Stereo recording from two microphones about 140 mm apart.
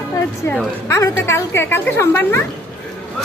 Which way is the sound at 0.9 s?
20° left (ahead or behind).